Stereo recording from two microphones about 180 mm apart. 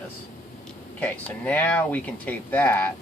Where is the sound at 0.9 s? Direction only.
10° left (ahead or behind).